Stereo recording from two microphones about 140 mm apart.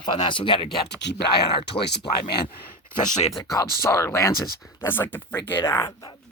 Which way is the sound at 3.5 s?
20° left (ahead or behind).